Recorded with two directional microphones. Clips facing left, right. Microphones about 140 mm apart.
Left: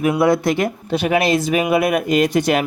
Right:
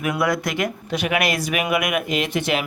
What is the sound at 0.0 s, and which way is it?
Speech, 30° left (ahead or behind).